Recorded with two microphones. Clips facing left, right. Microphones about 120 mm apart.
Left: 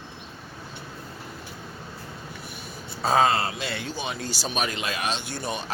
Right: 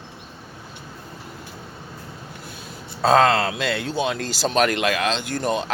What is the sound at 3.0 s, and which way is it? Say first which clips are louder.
Speech: right 5 dB; 75° right (ahead or behind).